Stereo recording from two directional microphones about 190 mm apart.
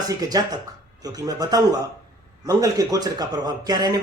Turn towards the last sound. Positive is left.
turn(degrees=-20)  # may be behind; listen again after turning